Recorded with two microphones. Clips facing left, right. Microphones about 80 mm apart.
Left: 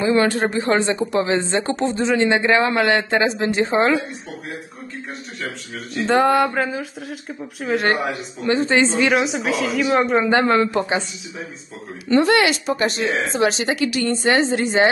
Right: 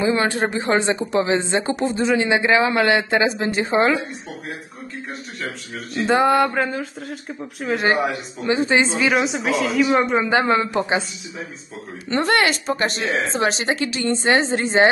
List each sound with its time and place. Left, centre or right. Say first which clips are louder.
0.0 s speech: left 2 dB; centre
5.9 s speech: even; centre
8.5 s speech: left 1 dB; centre
9.0 s speech: left 1 dB; centre
10.3 s speech: left 1 dB; centre
12.1 s a woman's voice: left 3 dB; right